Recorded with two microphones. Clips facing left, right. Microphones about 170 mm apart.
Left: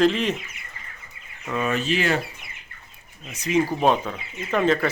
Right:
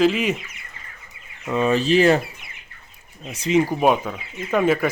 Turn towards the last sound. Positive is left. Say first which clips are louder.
# right 2 dB
turn(degrees=-10)  # may be behind; listen again after turning